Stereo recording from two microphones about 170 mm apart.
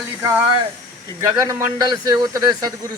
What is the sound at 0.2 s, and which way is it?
Speech, 15° right (ahead or behind).